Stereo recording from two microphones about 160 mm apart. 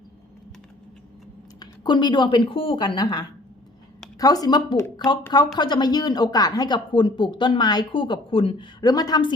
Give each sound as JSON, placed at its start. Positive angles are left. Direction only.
{"t": 1.5, "sound": "a woman's voice", "side_deg": 25}